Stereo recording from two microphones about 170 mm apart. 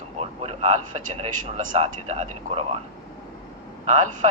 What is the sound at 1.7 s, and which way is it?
Speech, 40° right (ahead or behind).